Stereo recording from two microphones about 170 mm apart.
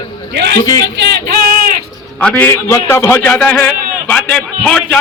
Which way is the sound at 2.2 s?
10° left (ahead or behind).